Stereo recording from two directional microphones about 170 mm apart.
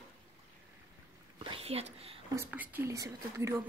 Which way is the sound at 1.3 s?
30° right (ahead or behind).